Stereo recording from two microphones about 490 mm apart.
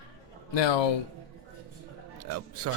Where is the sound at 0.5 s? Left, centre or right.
Left.